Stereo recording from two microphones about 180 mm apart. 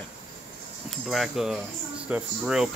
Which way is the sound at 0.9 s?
Centre (ahead or behind).